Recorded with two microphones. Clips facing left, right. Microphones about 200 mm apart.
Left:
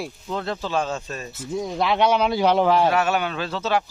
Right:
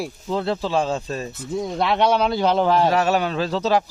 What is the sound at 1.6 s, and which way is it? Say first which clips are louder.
Speech: right 1 dB; centre (ahead or behind).